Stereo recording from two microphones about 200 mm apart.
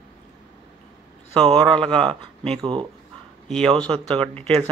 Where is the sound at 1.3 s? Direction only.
25° right (ahead or behind).